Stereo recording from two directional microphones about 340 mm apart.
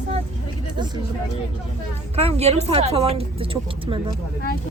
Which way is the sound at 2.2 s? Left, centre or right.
Centre.